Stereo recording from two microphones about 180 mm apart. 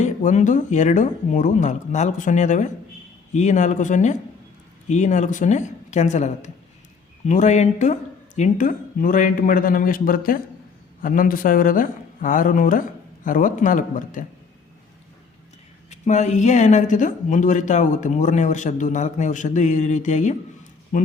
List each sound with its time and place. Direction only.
0.0 s speech: 40° left (ahead or behind)
15.9 s speech: 40° left (ahead or behind)